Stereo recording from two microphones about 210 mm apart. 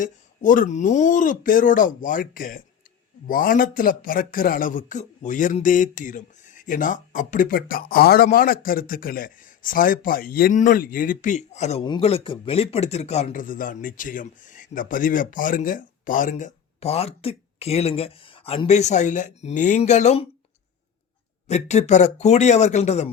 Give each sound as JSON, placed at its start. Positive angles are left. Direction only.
{"t": 0.0, "sound": "speech", "side_deg": 40}
{"t": 21.4, "sound": "speech", "side_deg": 30}